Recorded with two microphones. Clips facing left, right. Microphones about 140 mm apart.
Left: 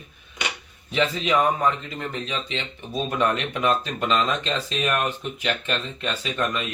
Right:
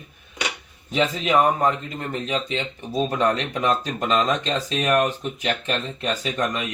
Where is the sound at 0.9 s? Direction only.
45° right (ahead or behind).